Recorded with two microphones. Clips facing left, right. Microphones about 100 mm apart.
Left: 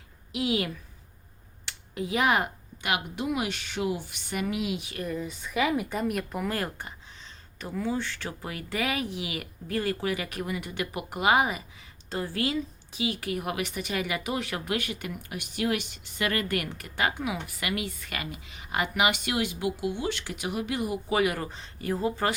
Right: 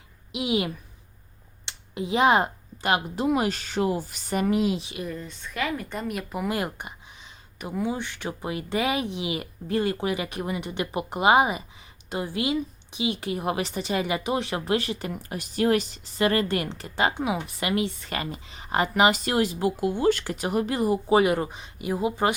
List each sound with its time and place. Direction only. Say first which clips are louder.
0.3 s a woman's voice: right 2 dB; 20° right (ahead or behind)
5.0 s a woman's voice: left 2 dB; 5° left (ahead or behind)
6.5 s speech: right 3 dB; 15° right (ahead or behind)